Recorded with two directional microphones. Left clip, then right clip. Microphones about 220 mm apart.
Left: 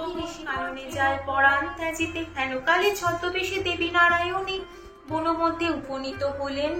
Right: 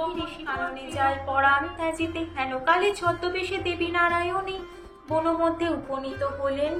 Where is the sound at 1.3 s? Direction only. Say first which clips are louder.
Left 1 dB; 30° right (ahead or behind).